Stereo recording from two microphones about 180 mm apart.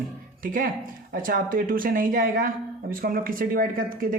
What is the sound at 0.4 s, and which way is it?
Speech, 50° right (ahead or behind).